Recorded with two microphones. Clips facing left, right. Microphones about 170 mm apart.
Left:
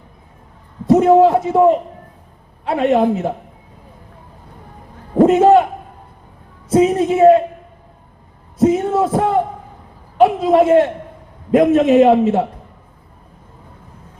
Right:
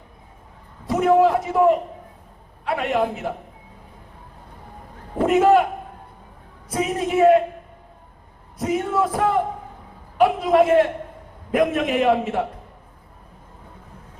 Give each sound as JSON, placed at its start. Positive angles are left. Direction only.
{"t": 0.9, "sound": "a man's voice", "side_deg": 25}
{"t": 5.1, "sound": "a sound", "side_deg": 25}
{"t": 6.7, "sound": "a woman's voice", "side_deg": 25}
{"t": 8.5, "sound": "music", "side_deg": 25}
{"t": 10.2, "sound": "a sound", "side_deg": 25}
{"t": 11.5, "sound": "a man's voice", "side_deg": 25}